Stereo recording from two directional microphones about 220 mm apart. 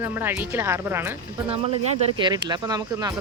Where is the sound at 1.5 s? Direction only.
25° right (ahead or behind).